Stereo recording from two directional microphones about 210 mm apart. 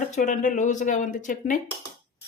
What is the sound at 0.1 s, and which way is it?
Speech, 35° left (ahead or behind).